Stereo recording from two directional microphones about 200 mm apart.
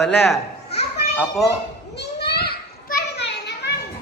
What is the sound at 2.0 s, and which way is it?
Children playing, 55° left (ahead or behind).